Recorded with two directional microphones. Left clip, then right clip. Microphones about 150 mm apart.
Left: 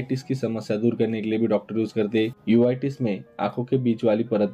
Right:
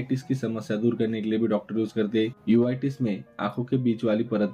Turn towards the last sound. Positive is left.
turn(degrees=15)  # may be behind; listen again after turning